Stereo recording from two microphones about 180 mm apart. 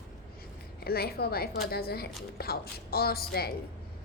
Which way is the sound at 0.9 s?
60° left (ahead or behind).